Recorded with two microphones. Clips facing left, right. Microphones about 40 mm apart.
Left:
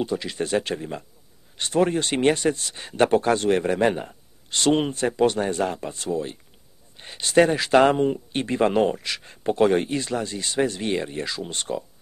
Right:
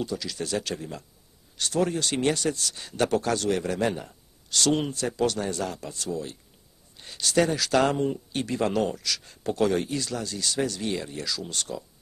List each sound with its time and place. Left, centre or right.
0.0 s speech: left